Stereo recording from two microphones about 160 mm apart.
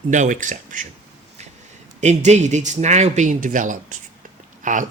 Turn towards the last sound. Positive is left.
turn(degrees=-55)  # may be behind; listen again after turning